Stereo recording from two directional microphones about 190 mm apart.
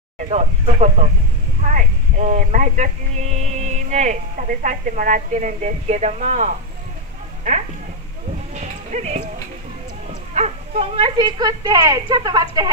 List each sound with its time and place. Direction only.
0.2 s speech: 35° right (ahead or behind)
8.5 s music: 40° right (ahead or behind)
10.3 s speech: 35° right (ahead or behind); by 12.6 s 20° right (ahead or behind)